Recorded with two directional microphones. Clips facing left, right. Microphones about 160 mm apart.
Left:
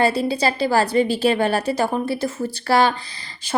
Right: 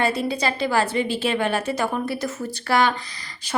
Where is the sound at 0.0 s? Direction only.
30° left (ahead or behind).